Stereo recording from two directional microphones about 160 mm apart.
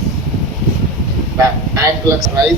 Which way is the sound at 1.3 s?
20° right (ahead or behind).